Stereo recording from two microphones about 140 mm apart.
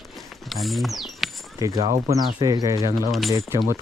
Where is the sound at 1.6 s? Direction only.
25° right (ahead or behind).